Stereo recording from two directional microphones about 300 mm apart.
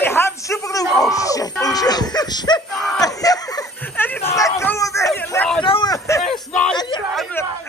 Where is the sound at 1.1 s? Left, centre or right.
Centre.